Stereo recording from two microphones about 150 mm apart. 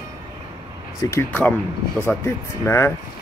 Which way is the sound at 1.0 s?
20° left (ahead or behind).